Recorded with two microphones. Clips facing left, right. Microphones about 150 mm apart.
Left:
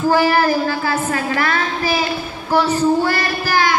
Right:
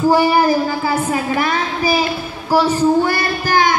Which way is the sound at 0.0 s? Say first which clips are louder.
Right 2 dB; 10° right (ahead or behind).